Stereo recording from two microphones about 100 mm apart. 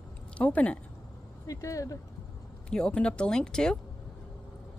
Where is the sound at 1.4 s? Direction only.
35° left (ahead or behind).